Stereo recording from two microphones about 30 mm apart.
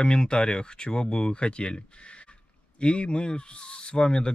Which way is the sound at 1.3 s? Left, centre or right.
Left.